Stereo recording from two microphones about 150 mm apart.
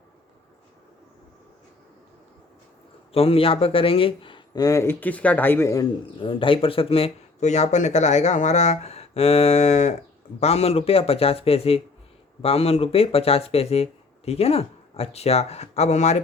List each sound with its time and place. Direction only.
3.1 s speech: 40° left (ahead or behind); by 5.9 s 20° left (ahead or behind)
6.1 s speech: 35° left (ahead or behind)